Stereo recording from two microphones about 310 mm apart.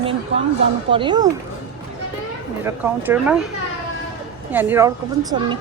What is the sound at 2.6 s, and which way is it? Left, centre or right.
Speech, centre.